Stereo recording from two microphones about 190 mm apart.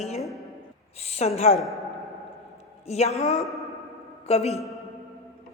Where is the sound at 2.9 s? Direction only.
35° left (ahead or behind).